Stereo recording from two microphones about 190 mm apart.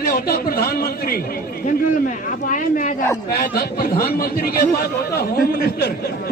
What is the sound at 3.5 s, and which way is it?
A man's voice, 55° left (ahead or behind).